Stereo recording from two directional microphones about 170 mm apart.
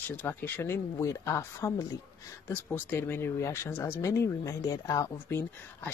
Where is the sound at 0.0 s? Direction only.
10° left (ahead or behind).